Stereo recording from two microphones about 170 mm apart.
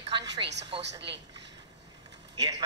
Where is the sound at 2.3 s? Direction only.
20° right (ahead or behind).